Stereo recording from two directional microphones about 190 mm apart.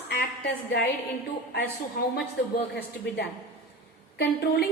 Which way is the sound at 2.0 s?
55° left (ahead or behind).